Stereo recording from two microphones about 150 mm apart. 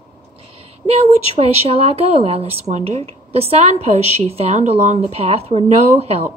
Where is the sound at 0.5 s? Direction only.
40° right (ahead or behind).